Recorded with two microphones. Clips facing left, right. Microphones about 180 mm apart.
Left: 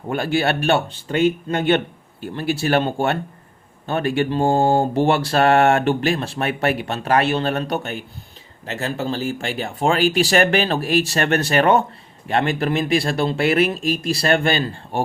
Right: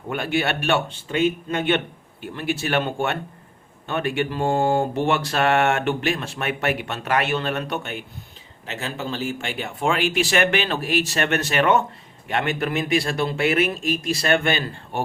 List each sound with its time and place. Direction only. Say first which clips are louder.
0.1 s speech: left 4 dB; 35° left (ahead or behind)